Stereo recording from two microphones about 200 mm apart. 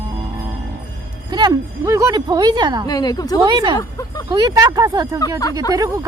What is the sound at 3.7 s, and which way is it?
Speech, 20° left (ahead or behind).